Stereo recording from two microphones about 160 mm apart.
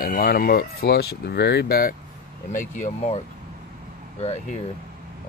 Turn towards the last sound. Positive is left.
turn(degrees=40)  # may be behind; listen again after turning